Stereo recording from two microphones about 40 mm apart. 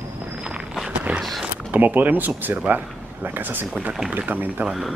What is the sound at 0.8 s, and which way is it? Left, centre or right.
Walk, right.